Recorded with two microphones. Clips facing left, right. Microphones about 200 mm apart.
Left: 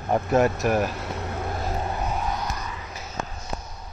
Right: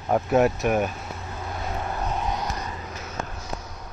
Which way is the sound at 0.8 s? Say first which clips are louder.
Left 3 dB; 75° left (ahead or behind).